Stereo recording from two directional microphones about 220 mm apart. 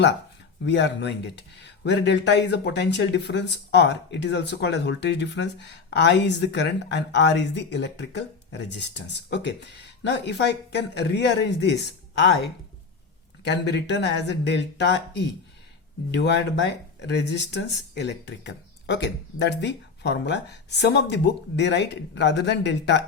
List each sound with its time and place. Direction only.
0.6 s speech: 55° left (ahead or behind)
13.4 s speech: 50° left (ahead or behind)